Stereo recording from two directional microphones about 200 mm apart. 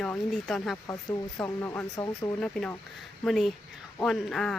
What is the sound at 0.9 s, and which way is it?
Speech, 15° left (ahead or behind).